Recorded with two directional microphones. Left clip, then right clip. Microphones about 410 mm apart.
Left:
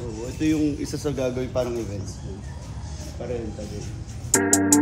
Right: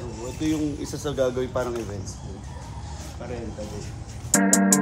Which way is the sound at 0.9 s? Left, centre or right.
Left.